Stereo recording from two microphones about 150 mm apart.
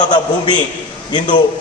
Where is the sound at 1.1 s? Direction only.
35° left (ahead or behind).